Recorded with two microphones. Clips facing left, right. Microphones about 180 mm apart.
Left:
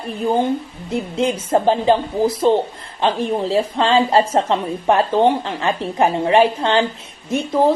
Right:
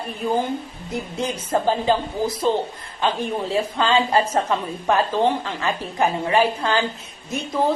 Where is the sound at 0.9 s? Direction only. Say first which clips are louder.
Left 7 dB; 30° left (ahead or behind).